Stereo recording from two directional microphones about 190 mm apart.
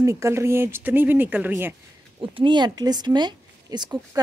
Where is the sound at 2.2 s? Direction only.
25° right (ahead or behind).